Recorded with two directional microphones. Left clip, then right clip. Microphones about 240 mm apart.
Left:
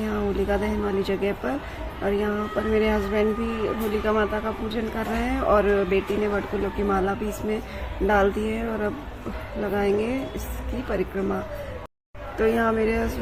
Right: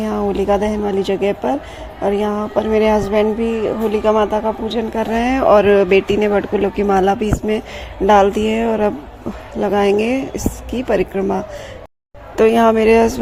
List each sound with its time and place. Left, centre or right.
0.0 s speech: right
12.4 s speech: right